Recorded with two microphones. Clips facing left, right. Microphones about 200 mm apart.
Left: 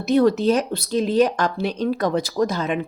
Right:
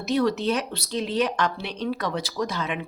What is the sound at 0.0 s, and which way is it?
A woman's voice, 50° left (ahead or behind).